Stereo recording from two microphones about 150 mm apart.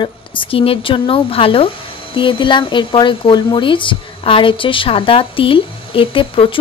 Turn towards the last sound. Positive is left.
turn(degrees=35)  # may be behind; listen again after turning